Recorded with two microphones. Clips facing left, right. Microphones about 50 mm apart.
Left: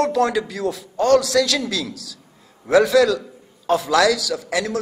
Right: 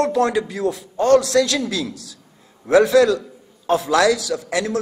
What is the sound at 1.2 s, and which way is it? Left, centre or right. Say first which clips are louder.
Speech: right 1 dB; right.